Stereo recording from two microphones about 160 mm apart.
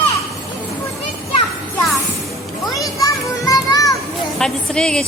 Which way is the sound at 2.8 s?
20° left (ahead or behind).